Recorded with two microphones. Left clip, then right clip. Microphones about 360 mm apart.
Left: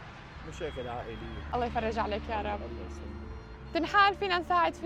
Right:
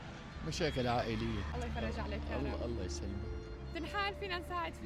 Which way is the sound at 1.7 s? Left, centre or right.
Left.